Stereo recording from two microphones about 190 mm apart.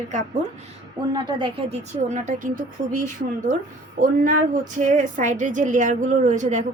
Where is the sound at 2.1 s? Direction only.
40° right (ahead or behind).